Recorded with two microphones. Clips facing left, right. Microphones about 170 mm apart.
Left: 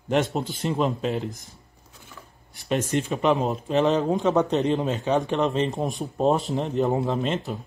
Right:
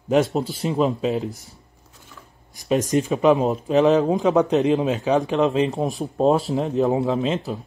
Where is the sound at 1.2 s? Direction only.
35° right (ahead or behind).